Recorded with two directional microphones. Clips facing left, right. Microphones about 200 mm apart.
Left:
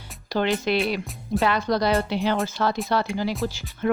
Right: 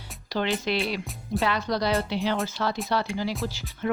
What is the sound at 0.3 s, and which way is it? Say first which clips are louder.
Speech: left 4 dB; 50° left (ahead or behind).